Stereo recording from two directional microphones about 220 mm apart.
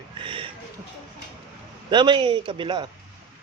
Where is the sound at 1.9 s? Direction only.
20° right (ahead or behind).